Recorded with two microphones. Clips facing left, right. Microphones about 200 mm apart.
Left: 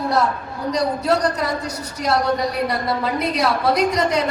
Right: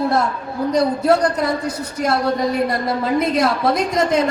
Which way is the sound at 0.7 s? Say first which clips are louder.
Right 3 dB; 50° right (ahead or behind).